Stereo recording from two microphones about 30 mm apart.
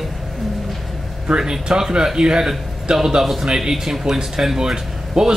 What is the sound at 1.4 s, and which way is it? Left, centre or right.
Speech, centre.